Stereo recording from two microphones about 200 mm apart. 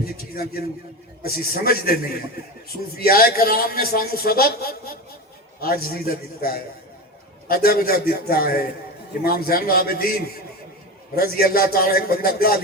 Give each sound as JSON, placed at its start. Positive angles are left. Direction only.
{"t": 0.0, "sound": "a man's voice", "side_deg": 50}
{"t": 11.2, "sound": "a man's voice", "side_deg": 50}